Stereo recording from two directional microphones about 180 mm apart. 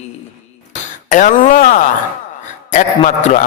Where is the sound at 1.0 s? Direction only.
45° left (ahead or behind).